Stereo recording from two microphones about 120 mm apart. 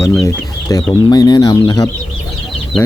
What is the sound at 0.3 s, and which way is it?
Speech, 30° left (ahead or behind).